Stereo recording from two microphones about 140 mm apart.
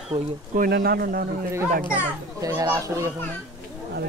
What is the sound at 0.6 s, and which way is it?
Speech, 90° right.